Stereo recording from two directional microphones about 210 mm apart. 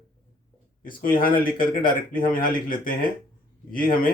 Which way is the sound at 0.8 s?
40° left (ahead or behind).